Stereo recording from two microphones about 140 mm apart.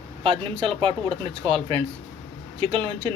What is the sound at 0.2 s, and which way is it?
Speech, 45° right (ahead or behind).